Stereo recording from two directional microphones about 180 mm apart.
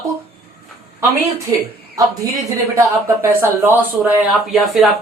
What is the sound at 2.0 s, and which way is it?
Speech, 20° right (ahead or behind).